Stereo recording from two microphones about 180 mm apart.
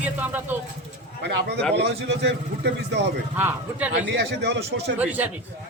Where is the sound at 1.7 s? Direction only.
70° right (ahead or behind).